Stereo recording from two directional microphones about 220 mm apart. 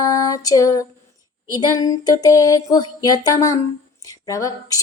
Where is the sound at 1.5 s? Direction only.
15° left (ahead or behind).